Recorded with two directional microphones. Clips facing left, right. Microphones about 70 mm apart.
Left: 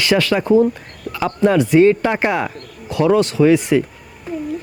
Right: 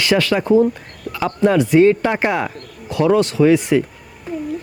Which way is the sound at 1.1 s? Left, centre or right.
Left.